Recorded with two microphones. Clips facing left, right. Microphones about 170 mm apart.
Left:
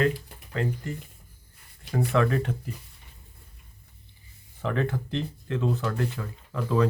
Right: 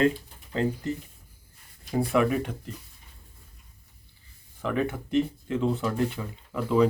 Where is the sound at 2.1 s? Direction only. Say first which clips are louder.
Even; 10° right (ahead or behind).